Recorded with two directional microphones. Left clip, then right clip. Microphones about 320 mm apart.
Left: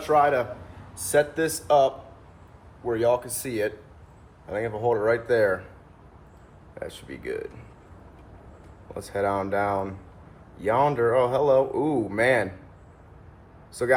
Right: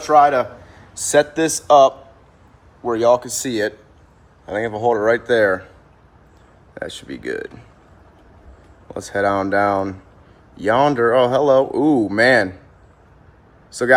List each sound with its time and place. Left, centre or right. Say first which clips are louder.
0.1 s speech: right 8 dB; right
6.7 s speech: right 7 dB; right
9.1 s speech: right 8 dB; right